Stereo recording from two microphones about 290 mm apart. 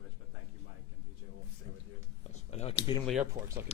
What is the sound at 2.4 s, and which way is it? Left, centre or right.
Speech, left.